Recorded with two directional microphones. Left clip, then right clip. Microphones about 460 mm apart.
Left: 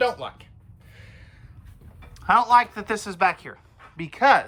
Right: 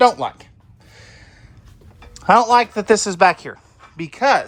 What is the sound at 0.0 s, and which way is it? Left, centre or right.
Speech, centre.